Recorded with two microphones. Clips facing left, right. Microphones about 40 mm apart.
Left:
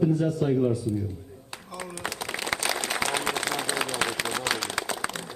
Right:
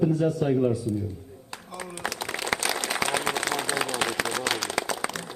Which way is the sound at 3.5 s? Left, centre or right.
Centre.